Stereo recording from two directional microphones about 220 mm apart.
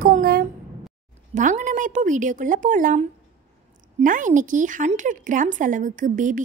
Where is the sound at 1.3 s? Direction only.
35° right (ahead or behind).